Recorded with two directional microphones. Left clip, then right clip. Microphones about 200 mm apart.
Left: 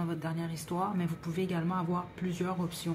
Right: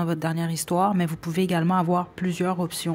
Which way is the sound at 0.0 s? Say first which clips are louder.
Right 9 dB; 45° right (ahead or behind).